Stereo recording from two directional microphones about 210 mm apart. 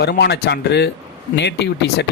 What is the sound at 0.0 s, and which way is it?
Speech, 50° left (ahead or behind).